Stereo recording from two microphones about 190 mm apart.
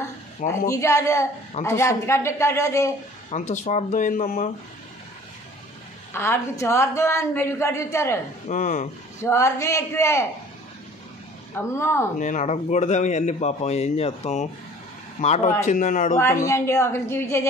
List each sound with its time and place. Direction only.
0.5 s a woman's voice: 15° left (ahead or behind)
3.3 s speech: 40° left (ahead or behind)
6.1 s a woman's voice: 15° left (ahead or behind)
8.5 s speech: 40° left (ahead or behind)
9.2 s a woman's voice: 15° left (ahead or behind)
11.5 s a woman's voice: 15° left (ahead or behind)
12.2 s speech: 40° left (ahead or behind)
16.4 s a woman's voice: 15° left (ahead or behind)